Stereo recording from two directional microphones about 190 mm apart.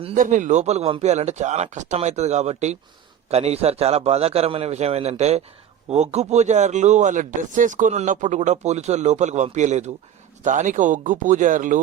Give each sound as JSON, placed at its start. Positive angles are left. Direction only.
{"t": 0.0, "sound": "speech", "side_deg": -40}